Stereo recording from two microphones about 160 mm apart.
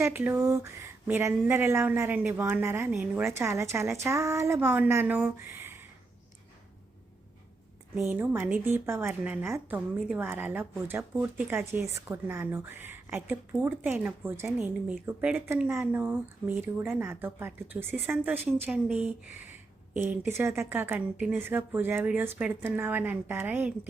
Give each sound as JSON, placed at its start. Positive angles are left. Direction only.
{"t": 0.0, "sound": "speech", "side_deg": -15}
{"t": 8.0, "sound": "speech", "side_deg": -15}